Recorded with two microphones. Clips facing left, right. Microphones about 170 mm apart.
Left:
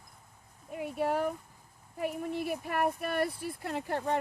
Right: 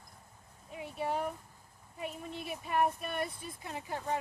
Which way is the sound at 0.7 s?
60° left (ahead or behind).